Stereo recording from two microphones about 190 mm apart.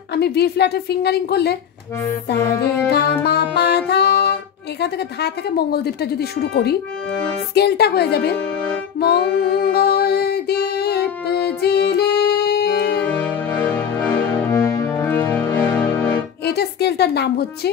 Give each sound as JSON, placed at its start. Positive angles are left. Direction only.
{"t": 0.1, "sound": "a woman's voice", "side_deg": 60}
{"t": 2.4, "sound": "music", "side_deg": 15}
{"t": 2.9, "sound": "a woman's voice", "side_deg": 60}
{"t": 9.0, "sound": "music", "side_deg": 55}
{"t": 14.1, "sound": "music", "side_deg": 15}
{"t": 16.4, "sound": "a woman's voice", "side_deg": 60}